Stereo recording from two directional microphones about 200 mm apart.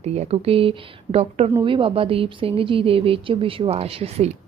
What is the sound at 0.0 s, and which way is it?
A woman's voice, 30° right (ahead or behind).